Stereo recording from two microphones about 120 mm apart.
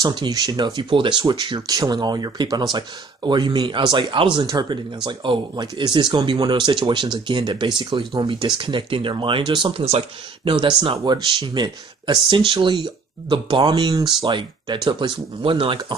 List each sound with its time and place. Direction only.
0.0 s speech: 35° right (ahead or behind)